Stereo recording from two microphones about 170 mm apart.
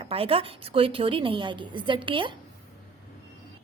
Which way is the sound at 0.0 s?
35° right (ahead or behind).